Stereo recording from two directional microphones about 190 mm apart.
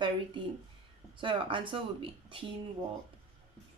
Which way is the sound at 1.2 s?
25° right (ahead or behind).